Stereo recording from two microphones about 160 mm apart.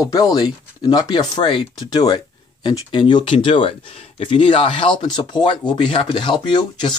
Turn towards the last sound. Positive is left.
turn(degrees=30)  # may be behind; listen again after turning